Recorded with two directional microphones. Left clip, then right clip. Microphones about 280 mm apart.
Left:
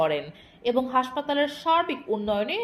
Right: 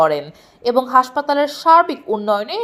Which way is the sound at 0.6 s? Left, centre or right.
Right.